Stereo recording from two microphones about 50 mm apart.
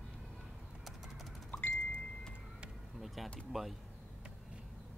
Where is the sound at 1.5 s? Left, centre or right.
Left.